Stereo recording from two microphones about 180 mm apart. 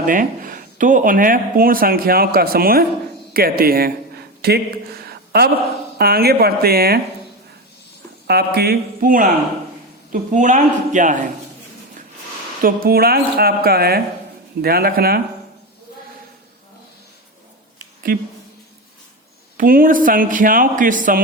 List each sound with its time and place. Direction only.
0.0 s a woman's voice: 50° right (ahead or behind)
8.3 s a woman's voice: 60° right (ahead or behind); by 11.2 s 45° right (ahead or behind)
12.6 s a woman's voice: 55° right (ahead or behind)
18.1 s speech: 50° right (ahead or behind)
19.5 s speech: 50° right (ahead or behind)